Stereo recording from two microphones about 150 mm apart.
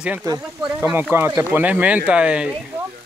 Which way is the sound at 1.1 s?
15° right (ahead or behind).